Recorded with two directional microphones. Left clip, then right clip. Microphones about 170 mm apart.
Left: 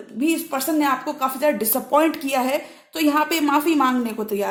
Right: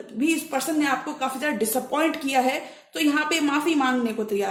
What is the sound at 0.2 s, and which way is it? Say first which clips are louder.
A woman's voice: left 2 dB; 35° left (ahead or behind).